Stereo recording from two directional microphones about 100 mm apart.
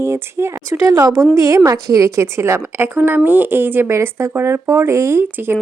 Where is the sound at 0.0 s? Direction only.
25° right (ahead or behind).